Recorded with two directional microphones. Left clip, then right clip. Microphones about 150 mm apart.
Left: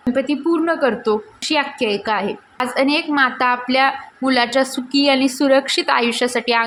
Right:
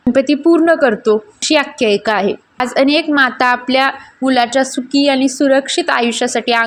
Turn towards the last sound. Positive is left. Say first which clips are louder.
# right 3 dB
turn(degrees=-20)  # may be behind; listen again after turning